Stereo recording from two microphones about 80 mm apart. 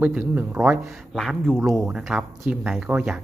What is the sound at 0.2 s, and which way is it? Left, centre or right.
Speech, right.